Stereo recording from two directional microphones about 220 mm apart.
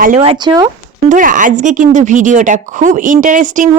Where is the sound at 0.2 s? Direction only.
20° right (ahead or behind).